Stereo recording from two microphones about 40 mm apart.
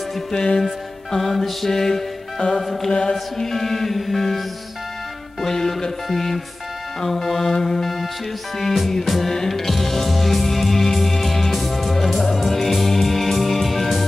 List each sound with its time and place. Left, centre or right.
0.3 s music: centre
0.7 s music: centre
2.6 s mantra: centre
2.9 s mantra: centre
5.4 s music: centre
7.0 s mantra: centre
9.3 s music: centre